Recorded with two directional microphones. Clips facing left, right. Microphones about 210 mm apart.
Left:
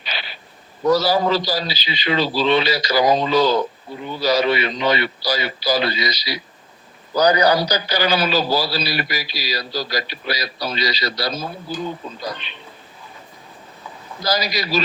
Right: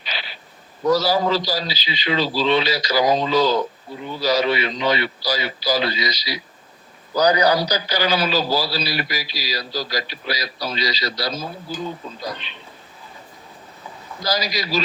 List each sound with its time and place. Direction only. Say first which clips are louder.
0.1 s a sound: left 1 dB; 60° left (ahead or behind)
0.9 s a man's voice: left 1 dB; 60° left (ahead or behind)
14.3 s a man's voice: left 2 dB; 60° left (ahead or behind)